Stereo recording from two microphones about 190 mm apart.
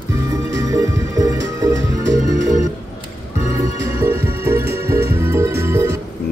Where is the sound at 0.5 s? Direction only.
20° right (ahead or behind).